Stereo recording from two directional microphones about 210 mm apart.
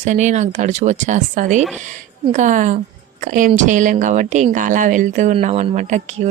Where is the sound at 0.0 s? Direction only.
35° right (ahead or behind).